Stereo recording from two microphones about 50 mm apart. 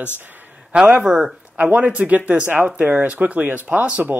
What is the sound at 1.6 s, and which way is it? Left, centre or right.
Speech, right.